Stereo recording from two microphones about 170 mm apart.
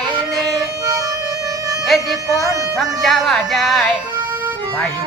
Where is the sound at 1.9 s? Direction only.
Centre (ahead or behind).